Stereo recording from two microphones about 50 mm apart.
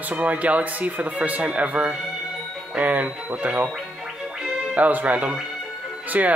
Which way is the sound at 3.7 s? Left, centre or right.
Centre.